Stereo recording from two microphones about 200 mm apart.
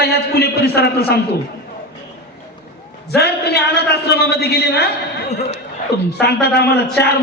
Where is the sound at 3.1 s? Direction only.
55° left (ahead or behind).